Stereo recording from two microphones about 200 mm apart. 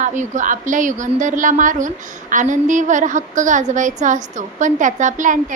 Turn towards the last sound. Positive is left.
turn(degrees=-40)  # may be behind; listen again after turning